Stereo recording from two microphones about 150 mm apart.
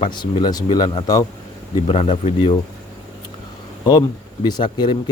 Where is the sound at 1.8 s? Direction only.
40° left (ahead or behind).